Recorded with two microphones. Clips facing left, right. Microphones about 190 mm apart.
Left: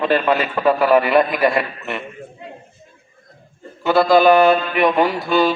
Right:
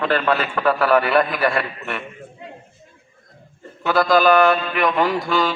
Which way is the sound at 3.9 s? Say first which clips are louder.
Left 3 dB; 25° left (ahead or behind).